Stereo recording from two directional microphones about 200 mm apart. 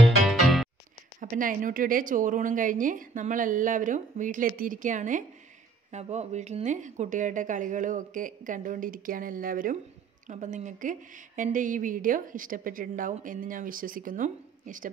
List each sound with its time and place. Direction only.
0.0 s music: centre (ahead or behind)
1.2 s a woman's voice: 40° right (ahead or behind)